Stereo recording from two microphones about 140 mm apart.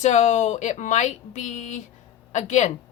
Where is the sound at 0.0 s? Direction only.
55° left (ahead or behind).